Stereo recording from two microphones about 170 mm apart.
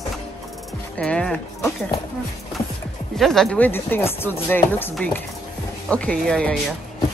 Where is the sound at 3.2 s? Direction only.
Centre (ahead or behind).